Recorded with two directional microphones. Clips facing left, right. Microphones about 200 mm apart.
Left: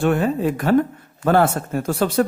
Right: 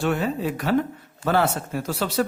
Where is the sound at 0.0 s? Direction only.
50° left (ahead or behind).